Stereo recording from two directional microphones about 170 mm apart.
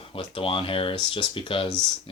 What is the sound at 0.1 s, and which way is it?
Speech, 30° left (ahead or behind).